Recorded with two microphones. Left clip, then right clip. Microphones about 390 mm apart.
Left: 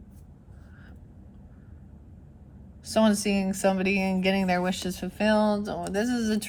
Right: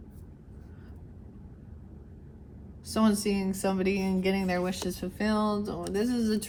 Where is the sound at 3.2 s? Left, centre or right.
Centre.